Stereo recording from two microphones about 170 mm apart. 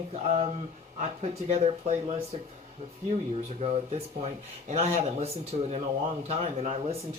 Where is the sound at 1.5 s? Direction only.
40° right (ahead or behind).